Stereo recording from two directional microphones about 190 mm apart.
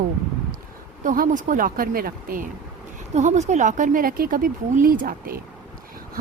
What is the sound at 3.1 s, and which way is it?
Speech, 35° right (ahead or behind).